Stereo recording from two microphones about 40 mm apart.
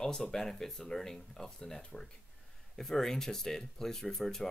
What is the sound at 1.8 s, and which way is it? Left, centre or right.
Speech, left.